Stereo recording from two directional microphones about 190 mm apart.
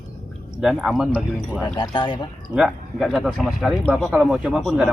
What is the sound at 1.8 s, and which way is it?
Speech, 25° left (ahead or behind).